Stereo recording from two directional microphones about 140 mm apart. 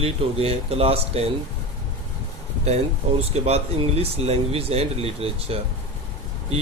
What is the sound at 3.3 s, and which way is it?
Speech, 50° right (ahead or behind).